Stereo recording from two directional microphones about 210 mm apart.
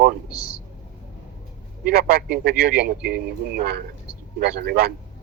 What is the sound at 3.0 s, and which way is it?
Speech, 5° right (ahead or behind).